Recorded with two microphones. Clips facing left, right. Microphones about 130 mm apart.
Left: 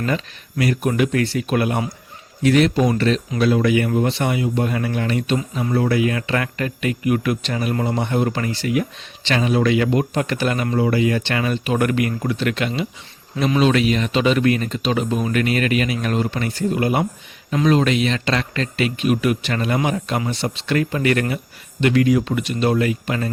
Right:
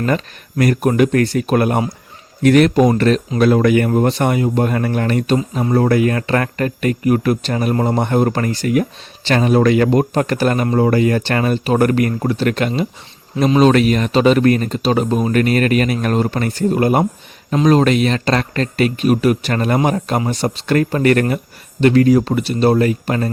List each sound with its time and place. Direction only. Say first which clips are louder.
0.0 s speech: right 4 dB; 45° right (ahead or behind)